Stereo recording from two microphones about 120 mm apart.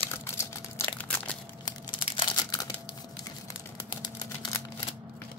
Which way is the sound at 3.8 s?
35° left (ahead or behind).